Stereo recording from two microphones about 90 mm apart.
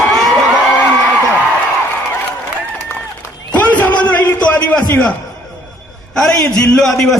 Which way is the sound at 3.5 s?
15° left (ahead or behind).